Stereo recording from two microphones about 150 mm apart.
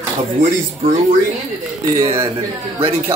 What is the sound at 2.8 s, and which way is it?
Speech, 40° right (ahead or behind).